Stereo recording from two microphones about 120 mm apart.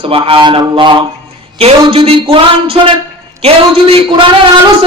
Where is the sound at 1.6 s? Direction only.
55° right (ahead or behind).